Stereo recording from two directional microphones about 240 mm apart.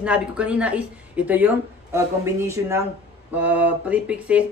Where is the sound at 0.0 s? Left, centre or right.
Centre.